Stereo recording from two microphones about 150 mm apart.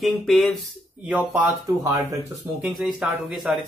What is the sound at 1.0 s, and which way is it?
Speech, 10° right (ahead or behind).